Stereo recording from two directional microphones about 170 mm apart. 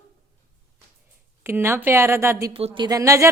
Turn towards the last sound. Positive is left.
turn(degrees=-20)  # may be behind; listen again after turning